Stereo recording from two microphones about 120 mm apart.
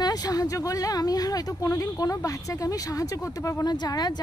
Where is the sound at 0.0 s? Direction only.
35° left (ahead or behind).